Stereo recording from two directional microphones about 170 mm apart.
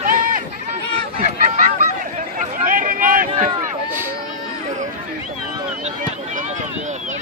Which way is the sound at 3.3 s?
40° right (ahead or behind).